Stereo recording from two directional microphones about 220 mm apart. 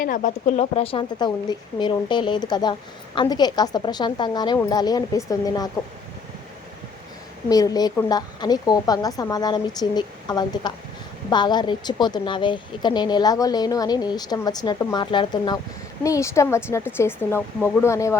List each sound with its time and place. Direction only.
0.0 s a woman's voice: 35° left (ahead or behind); by 5.7 s 15° left (ahead or behind)
7.5 s a woman's voice: 15° left (ahead or behind)